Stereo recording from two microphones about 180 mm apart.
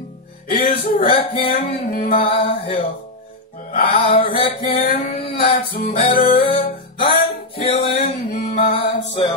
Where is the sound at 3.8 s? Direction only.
30° left (ahead or behind).